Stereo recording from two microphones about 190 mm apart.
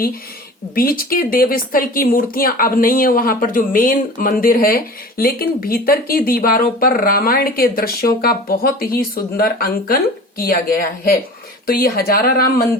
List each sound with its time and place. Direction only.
0.8 s speech: 50° left (ahead or behind)